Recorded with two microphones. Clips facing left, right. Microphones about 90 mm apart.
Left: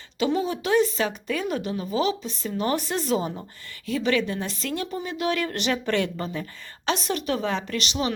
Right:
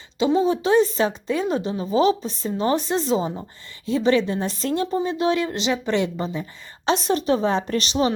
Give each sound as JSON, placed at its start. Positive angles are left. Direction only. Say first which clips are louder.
{"t": 0.2, "sound": "a woman's voice", "louder": "right 5 dB", "side_deg": -25}
{"t": 6.9, "sound": "a woman's voice", "louder": "right 6 dB", "side_deg": -35}